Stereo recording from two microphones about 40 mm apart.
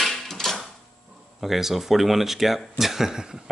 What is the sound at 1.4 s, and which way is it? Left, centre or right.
Speech, centre.